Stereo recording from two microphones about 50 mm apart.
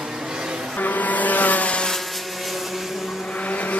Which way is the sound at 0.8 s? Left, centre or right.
Left.